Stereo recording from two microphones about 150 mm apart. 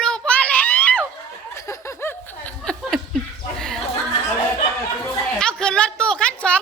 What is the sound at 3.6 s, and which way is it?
Chuckle, 5° left (ahead or behind).